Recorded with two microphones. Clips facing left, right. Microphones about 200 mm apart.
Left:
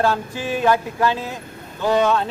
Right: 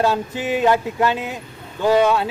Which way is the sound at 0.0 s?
20° right (ahead or behind).